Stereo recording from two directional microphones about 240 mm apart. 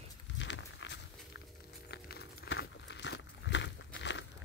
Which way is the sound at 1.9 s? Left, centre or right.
Left.